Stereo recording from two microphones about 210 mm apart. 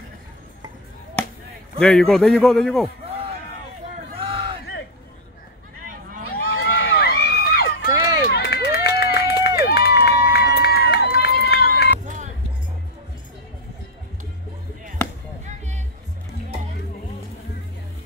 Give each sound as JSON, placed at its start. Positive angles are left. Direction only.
{"t": 1.8, "sound": "a man's voice", "side_deg": 0}
{"t": 4.2, "sound": "a sound", "side_deg": -25}
{"t": 6.5, "sound": "run", "side_deg": 70}
{"t": 7.0, "sound": "run", "side_deg": 50}
{"t": 15.4, "sound": "music", "side_deg": -35}